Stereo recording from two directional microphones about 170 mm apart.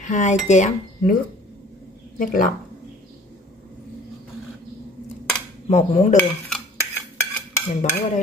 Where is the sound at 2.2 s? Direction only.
55° left (ahead or behind).